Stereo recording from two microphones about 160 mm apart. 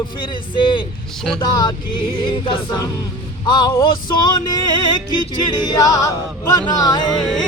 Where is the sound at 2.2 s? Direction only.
30° left (ahead or behind).